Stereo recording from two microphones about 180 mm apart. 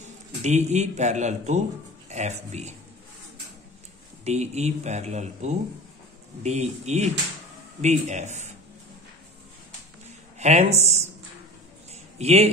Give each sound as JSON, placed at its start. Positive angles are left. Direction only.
{"t": 0.4, "sound": "speech", "side_deg": -40}
{"t": 4.2, "sound": "a man's voice", "side_deg": -40}
{"t": 10.4, "sound": "speech", "side_deg": -35}
{"t": 11.9, "sound": "a sound", "side_deg": -35}